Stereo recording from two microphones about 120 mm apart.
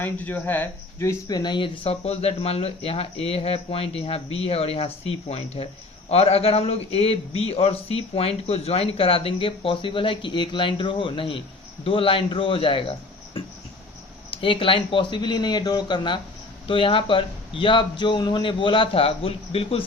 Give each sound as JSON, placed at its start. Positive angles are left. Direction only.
{"t": 0.0, "sound": "speech", "side_deg": 15}
{"t": 1.3, "sound": "a man's voice", "side_deg": 40}